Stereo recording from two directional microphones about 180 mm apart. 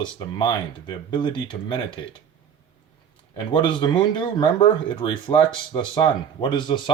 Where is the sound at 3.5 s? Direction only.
25° left (ahead or behind).